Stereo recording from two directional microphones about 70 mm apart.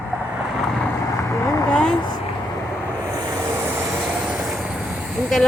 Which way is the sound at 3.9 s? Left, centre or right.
Centre.